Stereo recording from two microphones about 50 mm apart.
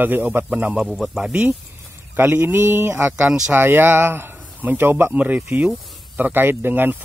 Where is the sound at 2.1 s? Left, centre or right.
Right.